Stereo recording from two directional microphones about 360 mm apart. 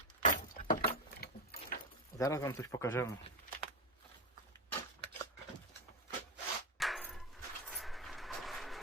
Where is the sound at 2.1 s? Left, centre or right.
Centre.